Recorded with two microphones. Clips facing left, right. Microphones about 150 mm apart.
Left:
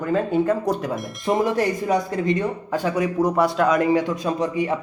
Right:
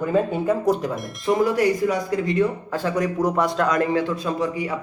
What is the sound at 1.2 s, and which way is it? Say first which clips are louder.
Speech: right 1 dB; 25° left (ahead or behind).